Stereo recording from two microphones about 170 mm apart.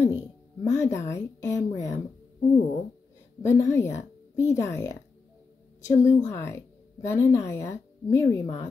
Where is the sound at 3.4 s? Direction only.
15° left (ahead or behind).